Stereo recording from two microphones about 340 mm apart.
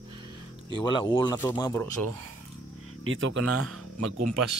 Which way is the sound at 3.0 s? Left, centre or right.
Right.